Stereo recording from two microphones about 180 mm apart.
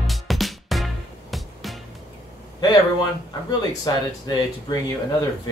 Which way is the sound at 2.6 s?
20° left (ahead or behind).